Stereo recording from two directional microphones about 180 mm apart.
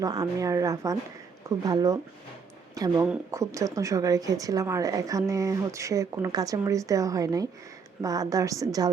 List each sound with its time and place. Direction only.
0.0 s a woman's voice: 20° right (ahead or behind)